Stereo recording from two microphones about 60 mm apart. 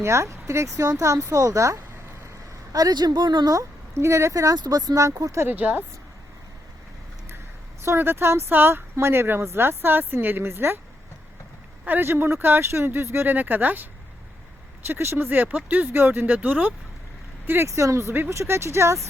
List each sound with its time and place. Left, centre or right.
0.0 s speech: right
2.7 s speech: right
3.4 s speech: right
5.5 s speech: right
7.9 s speech: right
11.9 s speech: right
13.2 s speech: right
14.8 s speech: right
15.3 s speech: right
17.7 s speech: right